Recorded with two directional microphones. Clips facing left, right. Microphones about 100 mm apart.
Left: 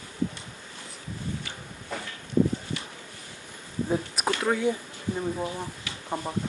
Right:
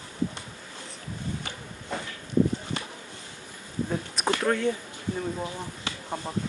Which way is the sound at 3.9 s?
5° left (ahead or behind).